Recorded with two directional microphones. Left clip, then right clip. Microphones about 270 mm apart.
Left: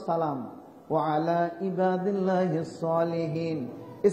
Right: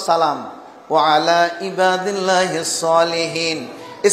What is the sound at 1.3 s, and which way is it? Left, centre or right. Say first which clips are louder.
Speech: right 11 dB; centre.